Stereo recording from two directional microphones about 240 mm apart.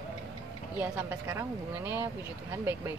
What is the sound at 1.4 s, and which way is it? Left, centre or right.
Speech, centre.